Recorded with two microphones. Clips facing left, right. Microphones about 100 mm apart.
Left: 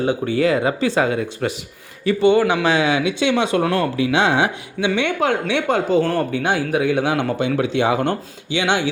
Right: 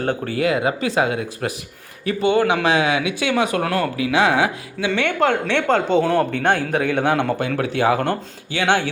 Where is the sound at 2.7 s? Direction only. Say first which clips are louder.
Left 1 dB; 30° left (ahead or behind); by 6.0 s 15° left (ahead or behind).